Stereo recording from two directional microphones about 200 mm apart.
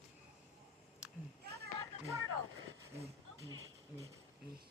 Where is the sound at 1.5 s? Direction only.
50° right (ahead or behind).